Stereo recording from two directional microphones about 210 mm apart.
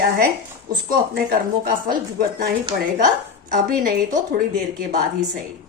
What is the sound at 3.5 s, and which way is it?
Speech, 40° right (ahead or behind).